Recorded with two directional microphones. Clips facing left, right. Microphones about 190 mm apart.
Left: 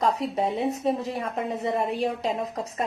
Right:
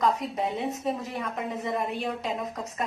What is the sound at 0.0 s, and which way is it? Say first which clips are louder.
A woman's voice: left 2 dB; 30° left (ahead or behind).